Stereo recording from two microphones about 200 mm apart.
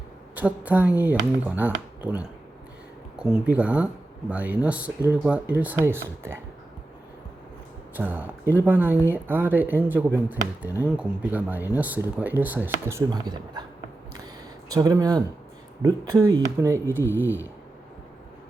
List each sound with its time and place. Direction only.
0.3 s speech: 5° right (ahead or behind)
7.9 s speech: 10° right (ahead or behind)
14.7 s speech: 20° right (ahead or behind)